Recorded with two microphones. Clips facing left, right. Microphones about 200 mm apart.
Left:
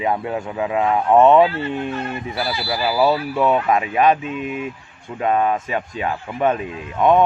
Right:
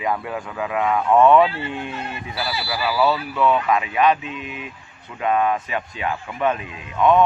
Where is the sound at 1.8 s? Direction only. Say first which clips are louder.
Left 5 dB; 50° left (ahead or behind).